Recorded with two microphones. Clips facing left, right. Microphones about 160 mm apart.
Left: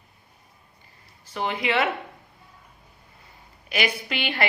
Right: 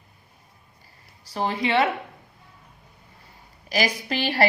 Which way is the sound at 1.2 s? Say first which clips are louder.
Right 2 dB; 35° right (ahead or behind).